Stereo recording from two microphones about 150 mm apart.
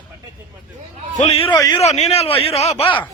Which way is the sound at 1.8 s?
45° left (ahead or behind).